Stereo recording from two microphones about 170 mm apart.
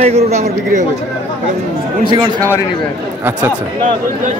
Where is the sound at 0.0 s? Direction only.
40° right (ahead or behind).